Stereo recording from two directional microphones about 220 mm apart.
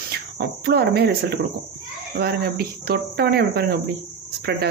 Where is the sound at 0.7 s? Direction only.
45° right (ahead or behind).